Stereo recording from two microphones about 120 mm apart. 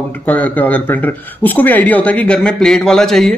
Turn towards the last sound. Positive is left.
turn(degrees=5)  # may be behind; listen again after turning